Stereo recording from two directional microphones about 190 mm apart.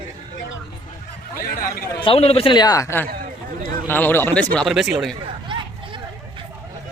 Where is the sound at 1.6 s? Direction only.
20° left (ahead or behind); by 5.1 s centre (ahead or behind).